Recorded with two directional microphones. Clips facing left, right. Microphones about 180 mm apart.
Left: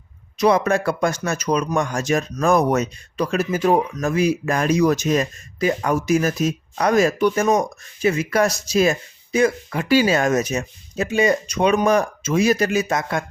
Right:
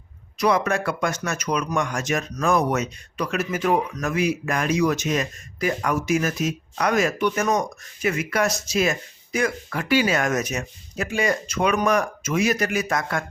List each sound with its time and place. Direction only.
0.3 s speech: 30° left (ahead or behind)